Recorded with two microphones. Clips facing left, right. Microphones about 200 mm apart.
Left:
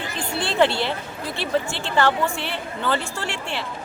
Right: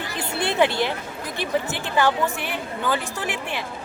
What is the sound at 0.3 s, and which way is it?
A woman's voice, 15° right (ahead or behind).